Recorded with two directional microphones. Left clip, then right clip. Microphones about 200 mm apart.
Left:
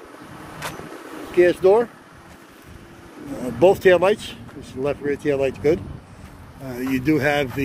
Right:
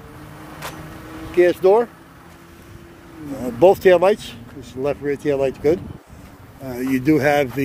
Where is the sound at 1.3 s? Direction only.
5° right (ahead or behind).